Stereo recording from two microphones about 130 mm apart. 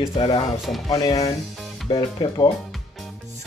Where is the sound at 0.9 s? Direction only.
30° left (ahead or behind).